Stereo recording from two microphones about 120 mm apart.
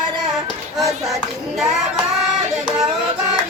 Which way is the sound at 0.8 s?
5° right (ahead or behind).